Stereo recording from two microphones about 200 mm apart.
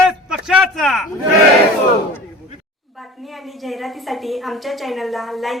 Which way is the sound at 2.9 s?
Centre (ahead or behind).